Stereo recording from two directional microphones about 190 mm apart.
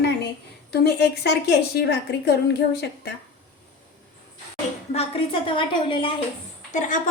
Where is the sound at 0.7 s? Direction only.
60° left (ahead or behind).